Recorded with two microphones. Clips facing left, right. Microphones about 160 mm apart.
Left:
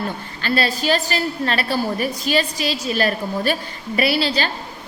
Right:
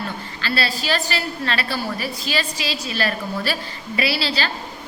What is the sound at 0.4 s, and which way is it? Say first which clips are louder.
A woman's voice: left 4 dB; 45° left (ahead or behind).